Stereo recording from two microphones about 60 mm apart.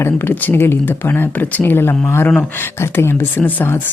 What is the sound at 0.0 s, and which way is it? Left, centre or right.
Speech, left.